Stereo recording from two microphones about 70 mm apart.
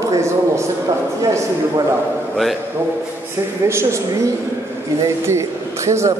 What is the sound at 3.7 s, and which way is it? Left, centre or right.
A man's voice, right.